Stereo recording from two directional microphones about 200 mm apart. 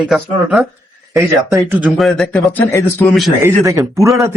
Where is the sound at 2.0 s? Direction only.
5° left (ahead or behind).